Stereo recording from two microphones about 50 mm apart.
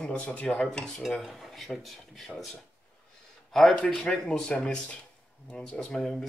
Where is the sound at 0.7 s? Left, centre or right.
Centre.